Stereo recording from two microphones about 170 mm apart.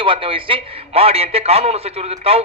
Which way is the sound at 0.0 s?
30° right (ahead or behind).